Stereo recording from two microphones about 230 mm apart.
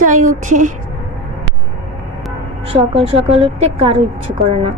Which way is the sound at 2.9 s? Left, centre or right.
Right.